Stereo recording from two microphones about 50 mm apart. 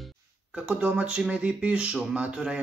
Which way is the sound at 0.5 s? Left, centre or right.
Right.